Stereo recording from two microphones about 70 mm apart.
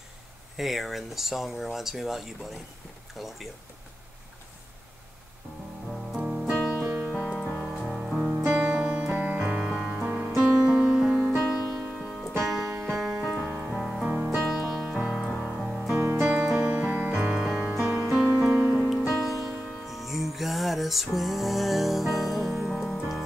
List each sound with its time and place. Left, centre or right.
0.6 s speech: centre
5.9 s music: centre
7.3 s music: centre
7.6 s music: centre
8.5 s music: right
11.2 s music: centre
14.0 s music: centre
14.3 s music: centre
16.2 s music: centre
17.4 s music: centre